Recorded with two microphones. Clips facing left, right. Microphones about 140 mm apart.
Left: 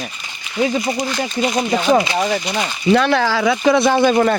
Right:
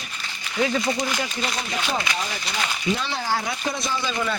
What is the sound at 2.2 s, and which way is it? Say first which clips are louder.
Speech: left 10 dB; 65° left (ahead or behind).